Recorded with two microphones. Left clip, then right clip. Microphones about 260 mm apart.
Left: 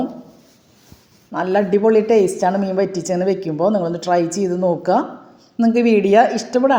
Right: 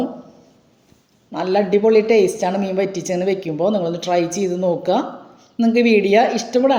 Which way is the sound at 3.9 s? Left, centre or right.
Left.